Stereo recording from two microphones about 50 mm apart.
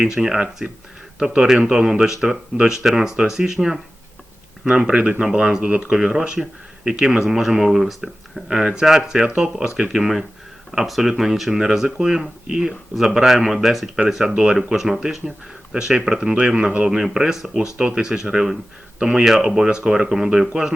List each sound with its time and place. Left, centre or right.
0.0 s speech: centre
10.7 s speech: centre
13.0 s speech: centre
14.3 s a man's voice: centre